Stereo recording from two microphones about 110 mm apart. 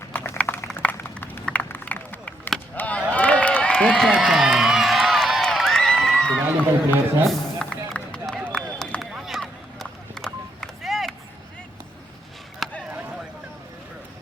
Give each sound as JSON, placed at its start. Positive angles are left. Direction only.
{"t": 0.1, "sound": "a sound", "side_deg": 20}
{"t": 2.7, "sound": "chop", "side_deg": 15}
{"t": 3.1, "sound": "crowd", "side_deg": 15}
{"t": 6.4, "sound": "a man's voice", "side_deg": -15}
{"t": 7.6, "sound": "run", "side_deg": 10}
{"t": 12.9, "sound": "chop", "side_deg": -15}